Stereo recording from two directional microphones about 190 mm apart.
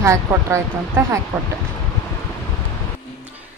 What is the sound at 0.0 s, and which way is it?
Speech, 15° right (ahead or behind).